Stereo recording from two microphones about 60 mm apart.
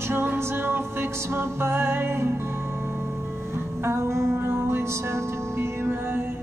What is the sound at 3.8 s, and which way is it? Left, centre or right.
Music, right.